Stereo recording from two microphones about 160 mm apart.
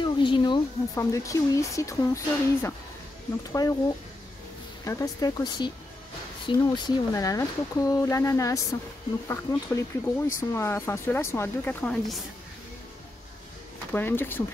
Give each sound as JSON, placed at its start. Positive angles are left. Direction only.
{"t": 0.0, "sound": "a sound", "side_deg": 30}
{"t": 0.9, "sound": "speech", "side_deg": 20}
{"t": 4.8, "sound": "speech", "side_deg": 20}
{"t": 13.9, "sound": "speech", "side_deg": 15}